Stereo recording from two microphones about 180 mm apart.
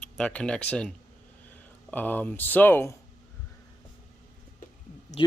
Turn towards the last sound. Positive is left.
turn(degrees=30)  # may be behind; listen again after turning